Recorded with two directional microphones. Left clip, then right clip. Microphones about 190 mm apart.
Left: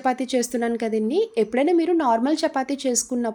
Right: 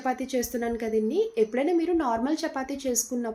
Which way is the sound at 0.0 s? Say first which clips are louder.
Left 6 dB; 60° left (ahead or behind).